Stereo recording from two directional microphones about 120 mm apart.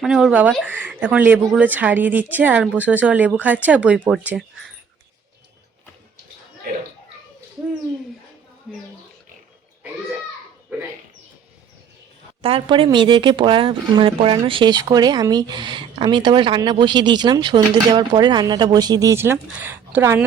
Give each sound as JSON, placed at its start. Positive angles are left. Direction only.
{"t": 0.0, "sound": "speech", "side_deg": -5}
{"t": 8.7, "sound": "speech", "side_deg": 0}
{"t": 12.4, "sound": "speech", "side_deg": -50}